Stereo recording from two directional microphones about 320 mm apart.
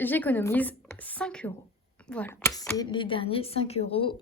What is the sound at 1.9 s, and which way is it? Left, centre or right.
Speech, centre.